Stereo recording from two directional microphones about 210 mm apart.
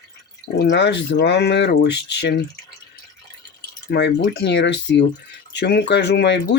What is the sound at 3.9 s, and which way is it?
Speech, 50° left (ahead or behind).